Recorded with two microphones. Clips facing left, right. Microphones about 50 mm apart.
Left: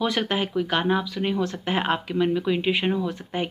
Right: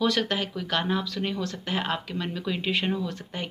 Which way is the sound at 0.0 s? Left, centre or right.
Left.